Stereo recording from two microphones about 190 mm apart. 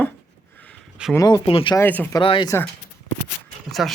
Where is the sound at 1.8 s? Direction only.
10° left (ahead or behind).